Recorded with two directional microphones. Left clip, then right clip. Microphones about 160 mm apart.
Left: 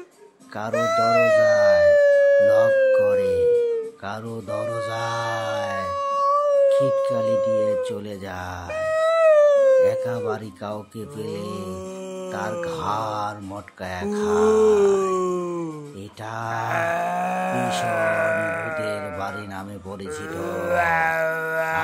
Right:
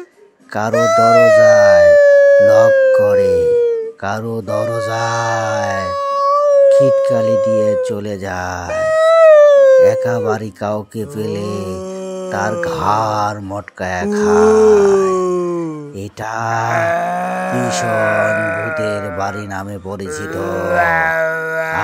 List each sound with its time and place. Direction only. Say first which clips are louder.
0.6 s speech: right 9 dB; 35° right (ahead or behind)
4.1 s mantra: right 12 dB; 40° right (ahead or behind)
6.7 s speech: right 9 dB; 45° right (ahead or behind)
8.7 s howl: right 9 dB; 40° right (ahead or behind)
12.4 s speech: right 10 dB; 45° right (ahead or behind)
14.8 s groan: right 7 dB; 30° right (ahead or behind)
16.6 s music: right 6 dB; 25° right (ahead or behind)
18.8 s speech: right 8 dB; 40° right (ahead or behind)
20.3 s mantra: right 7 dB; 30° right (ahead or behind)